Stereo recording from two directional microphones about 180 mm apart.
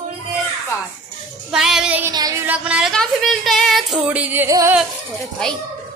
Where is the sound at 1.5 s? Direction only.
Centre (ahead or behind).